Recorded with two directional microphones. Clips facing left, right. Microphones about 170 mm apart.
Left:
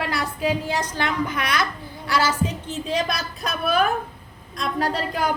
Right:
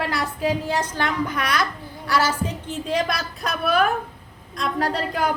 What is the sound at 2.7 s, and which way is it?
Speech, 15° right (ahead or behind).